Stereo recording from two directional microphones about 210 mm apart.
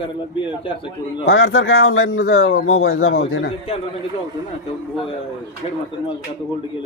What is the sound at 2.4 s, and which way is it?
Speech, 45° left (ahead or behind).